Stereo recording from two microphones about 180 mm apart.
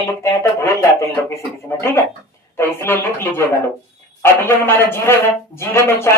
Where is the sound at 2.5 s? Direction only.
15° left (ahead or behind).